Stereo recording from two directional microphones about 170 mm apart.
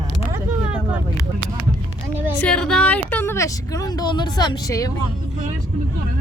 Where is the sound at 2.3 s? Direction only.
5° left (ahead or behind).